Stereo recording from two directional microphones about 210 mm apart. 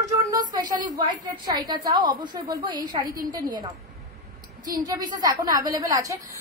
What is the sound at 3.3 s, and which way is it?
Speech, 15° right (ahead or behind).